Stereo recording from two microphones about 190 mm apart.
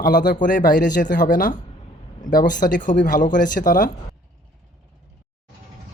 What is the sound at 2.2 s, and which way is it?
Speech, 20° left (ahead or behind).